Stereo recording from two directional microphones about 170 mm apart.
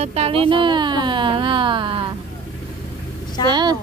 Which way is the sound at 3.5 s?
25° right (ahead or behind).